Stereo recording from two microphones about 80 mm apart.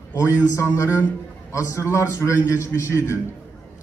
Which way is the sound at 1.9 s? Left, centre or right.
Left.